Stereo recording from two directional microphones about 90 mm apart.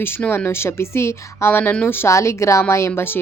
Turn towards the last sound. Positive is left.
turn(degrees=25)  # may be behind; listen again after turning